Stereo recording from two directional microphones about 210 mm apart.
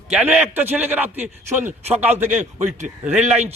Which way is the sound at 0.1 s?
10° right (ahead or behind).